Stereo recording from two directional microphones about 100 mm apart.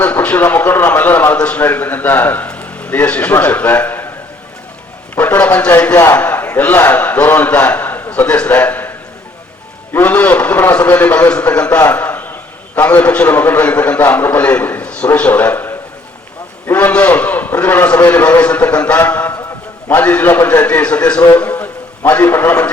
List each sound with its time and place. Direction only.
0.0 s a man's voice: 15° left (ahead or behind)
5.1 s a man's voice: 15° left (ahead or behind)
9.9 s a man's voice: 15° left (ahead or behind)
11.9 s a sound: 15° left (ahead or behind)
12.7 s a man's voice: 15° left (ahead or behind)